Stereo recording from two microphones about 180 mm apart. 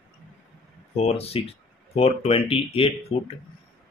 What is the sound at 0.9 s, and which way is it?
Speech, 35° left (ahead or behind).